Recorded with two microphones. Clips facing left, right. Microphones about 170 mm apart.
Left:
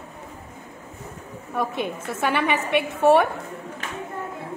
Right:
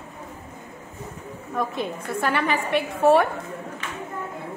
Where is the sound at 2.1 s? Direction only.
Centre (ahead or behind).